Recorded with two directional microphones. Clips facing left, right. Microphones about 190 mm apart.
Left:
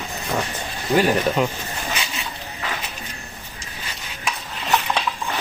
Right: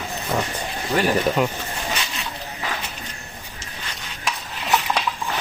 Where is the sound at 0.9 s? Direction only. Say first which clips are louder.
Left 2 dB; 5° left (ahead or behind).